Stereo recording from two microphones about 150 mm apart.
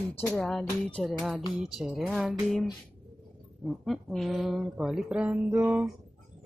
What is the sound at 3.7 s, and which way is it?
Speech, centre (ahead or behind).